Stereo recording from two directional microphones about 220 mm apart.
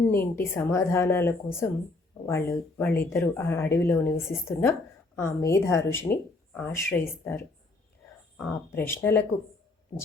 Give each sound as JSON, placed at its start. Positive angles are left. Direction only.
{"t": 0.0, "sound": "speech", "side_deg": 10}
{"t": 8.4, "sound": "speech", "side_deg": 10}